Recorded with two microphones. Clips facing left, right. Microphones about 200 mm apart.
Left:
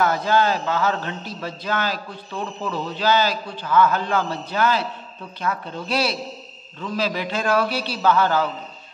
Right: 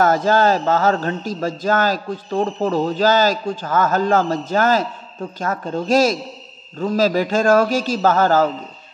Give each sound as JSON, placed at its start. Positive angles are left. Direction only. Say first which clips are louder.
{"t": 0.0, "sound": "a man's voice", "louder": "right 4 dB", "side_deg": -45}